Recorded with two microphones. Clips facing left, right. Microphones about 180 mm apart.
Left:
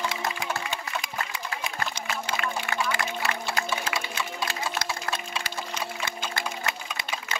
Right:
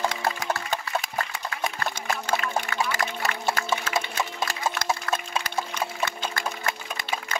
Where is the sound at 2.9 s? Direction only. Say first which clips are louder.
Right 1 dB; 40° right (ahead or behind).